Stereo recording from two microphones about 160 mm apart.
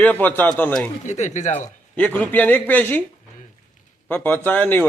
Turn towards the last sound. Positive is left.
turn(degrees=10)  # may be behind; listen again after turning